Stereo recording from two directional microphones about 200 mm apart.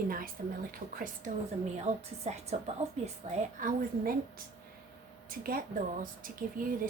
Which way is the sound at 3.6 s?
45° right (ahead or behind).